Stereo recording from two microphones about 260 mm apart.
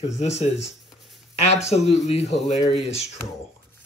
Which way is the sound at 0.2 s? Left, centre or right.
Left.